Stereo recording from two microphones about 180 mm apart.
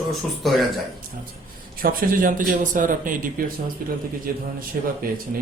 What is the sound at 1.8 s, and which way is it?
Speech, 50° right (ahead or behind).